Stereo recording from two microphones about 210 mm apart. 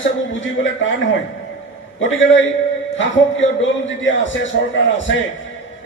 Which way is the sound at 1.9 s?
65° left (ahead or behind).